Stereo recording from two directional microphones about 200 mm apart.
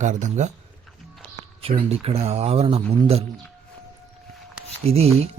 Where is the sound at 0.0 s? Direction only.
35° right (ahead or behind).